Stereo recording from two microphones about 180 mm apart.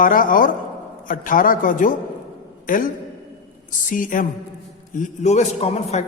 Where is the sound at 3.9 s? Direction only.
50° left (ahead or behind).